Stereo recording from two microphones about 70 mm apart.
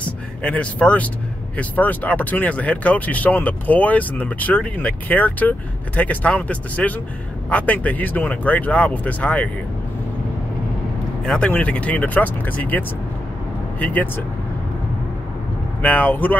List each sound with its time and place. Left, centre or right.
0.0 s speech: centre
11.3 s speech: centre
15.8 s speech: left